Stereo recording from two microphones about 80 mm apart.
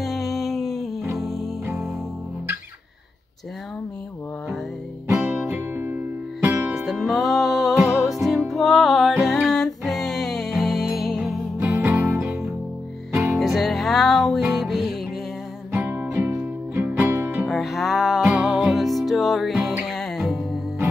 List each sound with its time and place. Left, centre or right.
0.0 s music: centre
5.0 s music: right
5.5 s music: right
6.7 s music: centre
11.7 s music: right
13.4 s music: centre
15.9 s music: right
17.5 s music: centre